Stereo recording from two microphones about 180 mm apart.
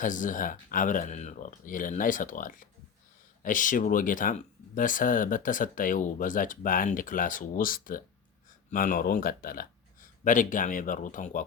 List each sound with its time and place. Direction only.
0.0 s speech: 45° left (ahead or behind)